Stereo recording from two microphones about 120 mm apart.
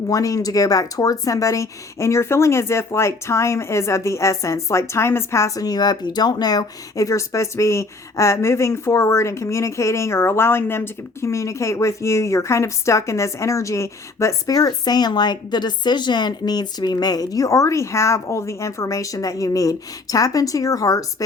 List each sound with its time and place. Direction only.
0.1 s speech: 30° left (ahead or behind)